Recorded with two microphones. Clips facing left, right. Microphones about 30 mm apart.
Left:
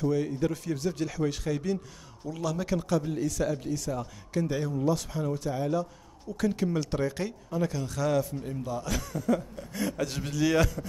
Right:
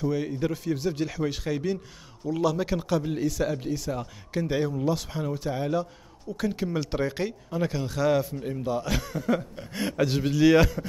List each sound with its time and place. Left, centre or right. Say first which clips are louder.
0.0 s speech: even; centre
6.3 s speech: even; centre